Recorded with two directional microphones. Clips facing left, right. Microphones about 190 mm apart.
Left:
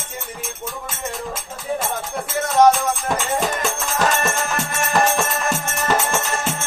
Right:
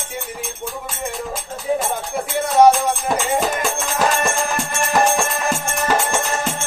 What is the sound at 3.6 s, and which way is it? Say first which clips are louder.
Music: right 1 dB; centre (ahead or behind).